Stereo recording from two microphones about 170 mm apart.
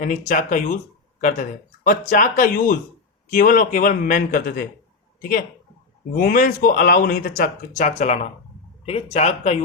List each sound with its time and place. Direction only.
0.0 s speech: 50° left (ahead or behind)